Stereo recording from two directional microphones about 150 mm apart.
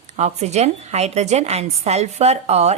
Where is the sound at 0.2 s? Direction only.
45° right (ahead or behind).